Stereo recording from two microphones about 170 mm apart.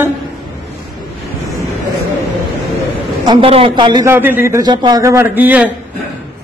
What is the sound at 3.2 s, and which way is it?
Speech, 30° right (ahead or behind).